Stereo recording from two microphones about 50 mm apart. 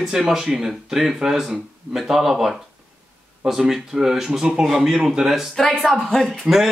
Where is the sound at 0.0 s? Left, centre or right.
Centre.